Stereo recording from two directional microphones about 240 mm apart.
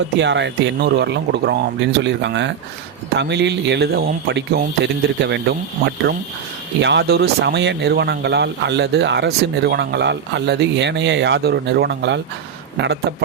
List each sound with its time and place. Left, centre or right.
0.2 s a man's voice: right